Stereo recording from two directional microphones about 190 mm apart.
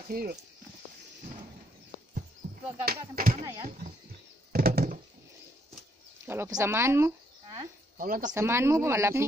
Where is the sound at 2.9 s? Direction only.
45° right (ahead or behind).